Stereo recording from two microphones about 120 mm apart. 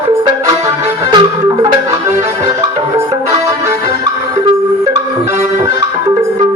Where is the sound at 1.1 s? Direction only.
40° right (ahead or behind).